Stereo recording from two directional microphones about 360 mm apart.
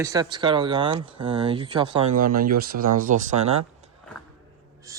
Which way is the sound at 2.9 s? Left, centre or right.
Right.